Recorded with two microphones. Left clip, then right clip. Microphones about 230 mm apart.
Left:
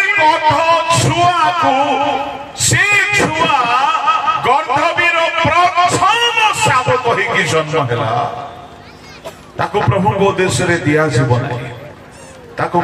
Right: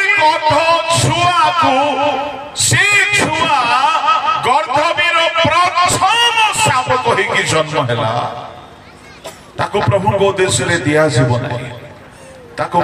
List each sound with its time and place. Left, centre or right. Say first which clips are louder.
0.0 s music: even; right
9.2 s a man's voice: even; right
12.6 s a man's voice: left 1 dB; right